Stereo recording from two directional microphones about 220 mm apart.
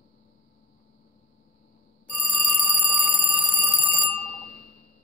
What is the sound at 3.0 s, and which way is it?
Alarm clock, 5° left (ahead or behind).